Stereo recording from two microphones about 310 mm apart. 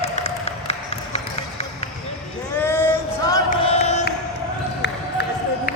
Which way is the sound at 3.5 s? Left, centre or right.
Left.